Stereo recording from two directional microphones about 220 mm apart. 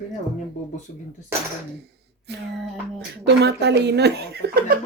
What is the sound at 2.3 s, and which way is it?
Speech, 50° right (ahead or behind).